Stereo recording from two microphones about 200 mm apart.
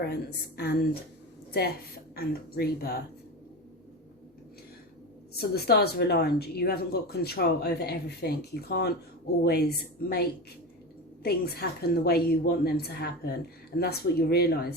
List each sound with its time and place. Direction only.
0.0 s speech: 55° left (ahead or behind)
2.1 s speech: 50° left (ahead or behind)
5.6 s speech: 55° left (ahead or behind)